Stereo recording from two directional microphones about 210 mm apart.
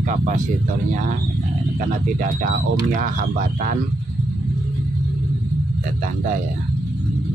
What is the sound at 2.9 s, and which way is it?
Speech, 40° right (ahead or behind).